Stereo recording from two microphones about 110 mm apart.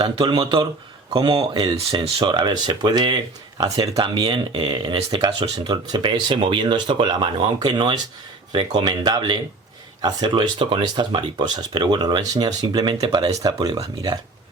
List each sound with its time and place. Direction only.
0.0 s speech: 45° right (ahead or behind)